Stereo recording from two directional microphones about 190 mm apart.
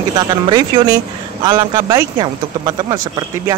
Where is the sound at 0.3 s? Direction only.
20° right (ahead or behind).